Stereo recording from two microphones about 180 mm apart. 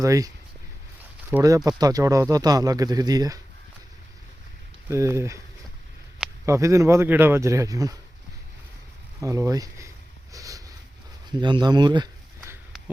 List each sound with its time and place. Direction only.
0.0 s speech: 20° right (ahead or behind)
1.3 s speech: 20° right (ahead or behind)
4.9 s speech: 15° right (ahead or behind)
6.4 s speech: 15° right (ahead or behind)
9.2 s speech: 20° right (ahead or behind)
10.3 s a sound: 20° right (ahead or behind)
11.3 s speech: 25° right (ahead or behind)